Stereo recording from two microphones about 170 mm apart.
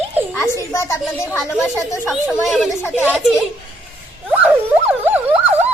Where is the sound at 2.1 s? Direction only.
Centre (ahead or behind).